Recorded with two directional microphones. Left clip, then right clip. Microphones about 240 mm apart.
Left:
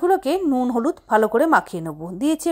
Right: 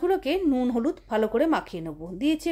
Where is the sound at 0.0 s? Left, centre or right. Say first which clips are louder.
Left 5 dB; centre.